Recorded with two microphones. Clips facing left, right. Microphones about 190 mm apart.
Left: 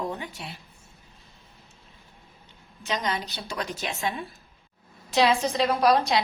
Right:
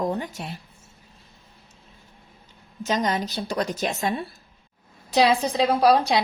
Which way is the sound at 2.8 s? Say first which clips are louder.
Right 5 dB; 40° right (ahead or behind).